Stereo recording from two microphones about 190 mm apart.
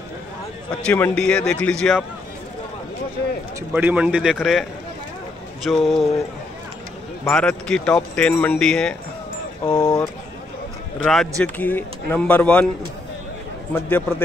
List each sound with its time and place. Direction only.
0.8 s speech: 10° left (ahead or behind)
3.7 s speech: 5° right (ahead or behind)
7.2 s speech: 5° left (ahead or behind)
9.7 s speech: 20° left (ahead or behind)
11.1 s speech: centre (ahead or behind)
13.7 s speech: 10° left (ahead or behind)